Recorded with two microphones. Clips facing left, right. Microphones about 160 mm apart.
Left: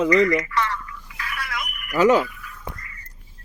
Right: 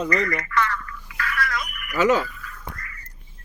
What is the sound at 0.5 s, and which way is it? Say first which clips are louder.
Telephone: right 1 dB; 25° left (ahead or behind).